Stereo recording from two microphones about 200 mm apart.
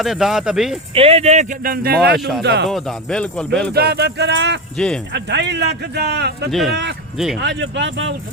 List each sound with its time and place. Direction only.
0.0 s speech: centre (ahead or behind)
0.9 s speech: 30° right (ahead or behind); by 2.0 s 50° right (ahead or behind)
2.4 s speech: 60° right (ahead or behind)
2.6 s speech: centre (ahead or behind)
3.8 s speech: 55° right (ahead or behind)
4.8 s speech: 5° left (ahead or behind)
5.1 s speech: 60° right (ahead or behind)
6.5 s speech: centre (ahead or behind)
7.3 s speech: 60° right (ahead or behind)